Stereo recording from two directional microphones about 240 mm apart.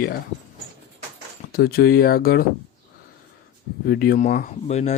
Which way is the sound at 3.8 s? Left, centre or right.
Left.